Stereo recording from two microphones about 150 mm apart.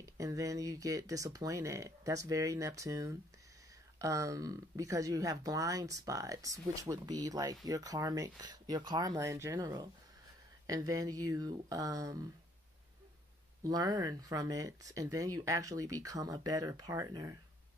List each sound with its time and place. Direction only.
0.0 s speech: 20° right (ahead or behind)
13.7 s speech: 25° right (ahead or behind)